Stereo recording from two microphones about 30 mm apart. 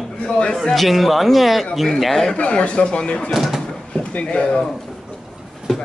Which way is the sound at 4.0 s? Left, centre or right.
Left.